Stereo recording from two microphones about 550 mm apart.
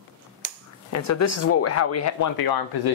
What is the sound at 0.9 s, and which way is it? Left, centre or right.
Speech, left.